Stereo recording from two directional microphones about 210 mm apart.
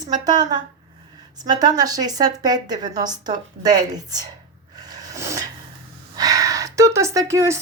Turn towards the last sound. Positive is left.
turn(degrees=-15)  # may be behind; listen again after turning